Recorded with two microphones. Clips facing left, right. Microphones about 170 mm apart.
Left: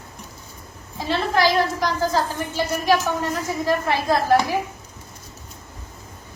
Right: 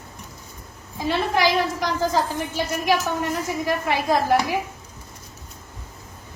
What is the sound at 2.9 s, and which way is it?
A woman's voice, 15° right (ahead or behind).